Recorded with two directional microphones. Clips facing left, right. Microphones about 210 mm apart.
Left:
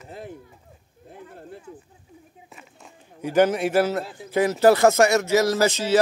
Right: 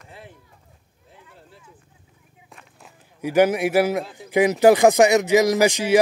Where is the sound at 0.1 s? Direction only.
45° left (ahead or behind).